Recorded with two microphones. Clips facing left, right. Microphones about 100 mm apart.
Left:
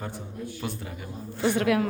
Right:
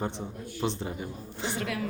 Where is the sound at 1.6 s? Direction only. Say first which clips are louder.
Left 10 dB; 55° left (ahead or behind).